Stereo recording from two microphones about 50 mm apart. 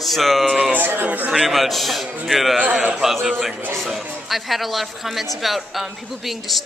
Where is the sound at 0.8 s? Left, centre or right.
Right.